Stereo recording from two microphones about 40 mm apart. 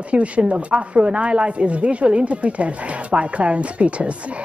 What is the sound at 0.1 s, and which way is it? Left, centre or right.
A woman's voice, right.